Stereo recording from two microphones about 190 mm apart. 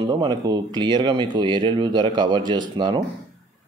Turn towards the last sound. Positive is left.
turn(degrees=-25)  # may be behind; listen again after turning